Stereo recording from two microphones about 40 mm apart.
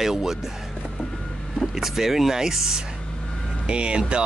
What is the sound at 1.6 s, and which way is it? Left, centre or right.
Speech, centre.